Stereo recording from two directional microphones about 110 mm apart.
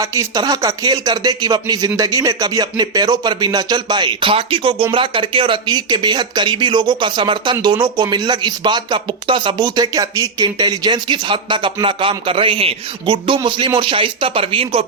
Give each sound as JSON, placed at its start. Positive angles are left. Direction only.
{"t": 0.0, "sound": "speech", "side_deg": -30}